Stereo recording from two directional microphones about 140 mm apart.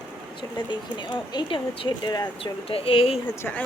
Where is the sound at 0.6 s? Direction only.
35° left (ahead or behind).